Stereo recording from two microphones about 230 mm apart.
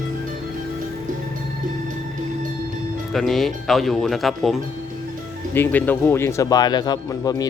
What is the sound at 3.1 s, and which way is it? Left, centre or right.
Speech, centre.